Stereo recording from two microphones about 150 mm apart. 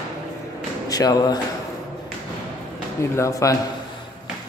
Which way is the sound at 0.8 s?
25° left (ahead or behind).